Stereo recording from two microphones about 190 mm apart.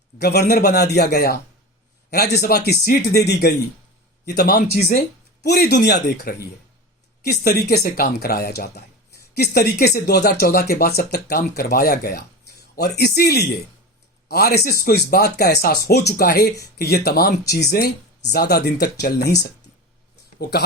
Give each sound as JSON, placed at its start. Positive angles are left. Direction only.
{"t": 0.2, "sound": "speech", "side_deg": 55}